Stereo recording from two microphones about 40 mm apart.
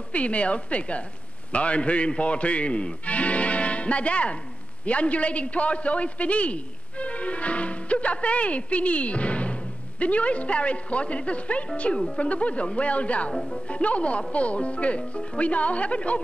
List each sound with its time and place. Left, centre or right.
0.1 s a man's voice: left
13.3 s speech: centre
13.7 s speech: left